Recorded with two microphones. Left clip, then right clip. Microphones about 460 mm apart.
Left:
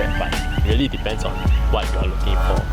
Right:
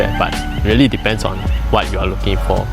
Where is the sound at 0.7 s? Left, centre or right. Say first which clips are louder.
Right 10 dB; right.